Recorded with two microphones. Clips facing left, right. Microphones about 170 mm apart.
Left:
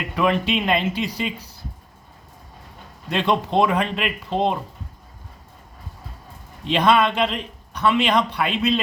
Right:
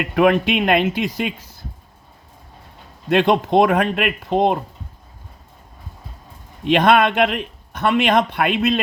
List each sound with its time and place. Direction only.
0.0 s speech: 60° right (ahead or behind)
3.1 s speech: 55° right (ahead or behind)
6.7 s speech: 55° right (ahead or behind)